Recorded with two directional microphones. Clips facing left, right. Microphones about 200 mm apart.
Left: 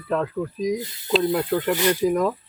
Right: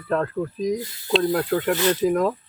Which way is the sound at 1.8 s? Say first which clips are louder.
Even; 15° left (ahead or behind).